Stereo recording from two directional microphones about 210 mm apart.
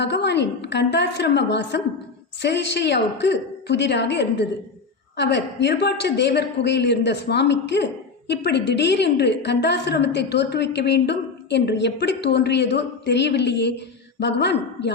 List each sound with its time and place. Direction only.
0.0 s a woman's voice: 55° left (ahead or behind)